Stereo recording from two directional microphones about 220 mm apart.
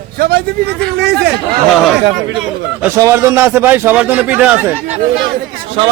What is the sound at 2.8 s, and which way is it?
A man's voice, 10° right (ahead or behind).